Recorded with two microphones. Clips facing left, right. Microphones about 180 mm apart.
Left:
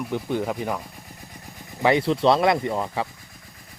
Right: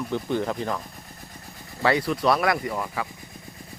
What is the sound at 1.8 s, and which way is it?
Speech, 20° left (ahead or behind).